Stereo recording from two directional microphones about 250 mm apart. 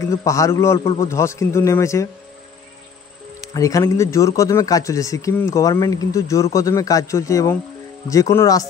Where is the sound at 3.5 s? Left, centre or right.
Centre.